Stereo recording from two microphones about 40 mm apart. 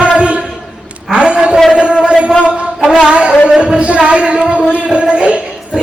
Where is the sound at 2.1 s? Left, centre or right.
Right.